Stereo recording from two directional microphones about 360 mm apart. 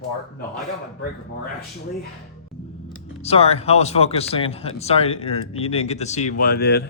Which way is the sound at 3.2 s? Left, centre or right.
Centre.